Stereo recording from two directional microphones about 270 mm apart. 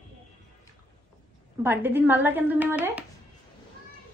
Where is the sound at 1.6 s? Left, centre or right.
Centre.